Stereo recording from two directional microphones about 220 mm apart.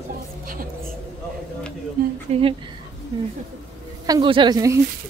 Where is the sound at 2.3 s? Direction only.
25° right (ahead or behind).